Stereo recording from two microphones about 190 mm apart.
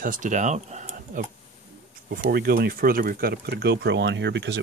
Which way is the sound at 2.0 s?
55° right (ahead or behind).